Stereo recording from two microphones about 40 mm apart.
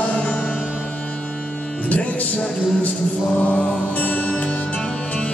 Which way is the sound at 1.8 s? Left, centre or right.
Left.